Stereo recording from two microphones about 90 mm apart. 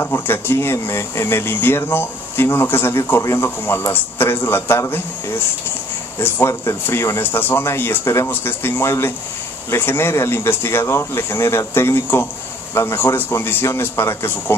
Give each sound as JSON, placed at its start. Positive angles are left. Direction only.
{"t": 0.0, "sound": "speech", "side_deg": 25}
{"t": 6.6, "sound": "speech", "side_deg": 35}